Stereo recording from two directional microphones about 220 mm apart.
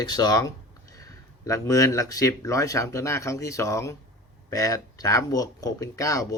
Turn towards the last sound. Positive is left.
turn(degrees=15)  # may be behind; listen again after turning